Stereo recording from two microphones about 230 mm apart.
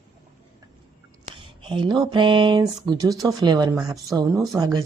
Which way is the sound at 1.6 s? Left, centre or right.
Right.